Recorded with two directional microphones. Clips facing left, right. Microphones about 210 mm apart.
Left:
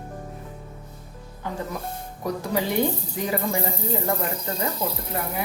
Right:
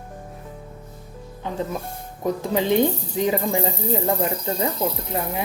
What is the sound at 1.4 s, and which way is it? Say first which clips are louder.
A woman's voice: right 3 dB; 20° right (ahead or behind).